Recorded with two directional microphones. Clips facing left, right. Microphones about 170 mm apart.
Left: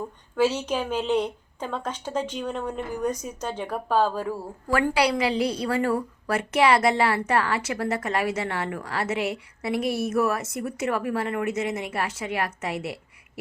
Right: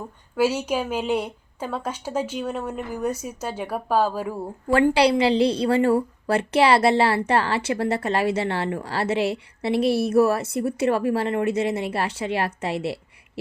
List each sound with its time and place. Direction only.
0.3 s a woman's voice: 10° right (ahead or behind)
4.7 s a woman's voice: 30° right (ahead or behind)